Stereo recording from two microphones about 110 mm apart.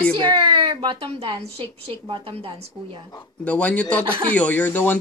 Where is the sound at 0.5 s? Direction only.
45° right (ahead or behind).